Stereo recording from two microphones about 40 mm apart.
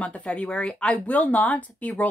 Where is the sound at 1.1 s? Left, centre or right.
Left.